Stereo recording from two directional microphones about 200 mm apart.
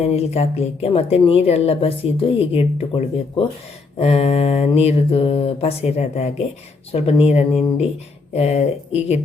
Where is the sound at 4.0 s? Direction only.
30° left (ahead or behind).